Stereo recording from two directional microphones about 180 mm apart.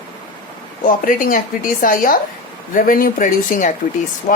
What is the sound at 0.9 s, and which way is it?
Speech, 50° left (ahead or behind).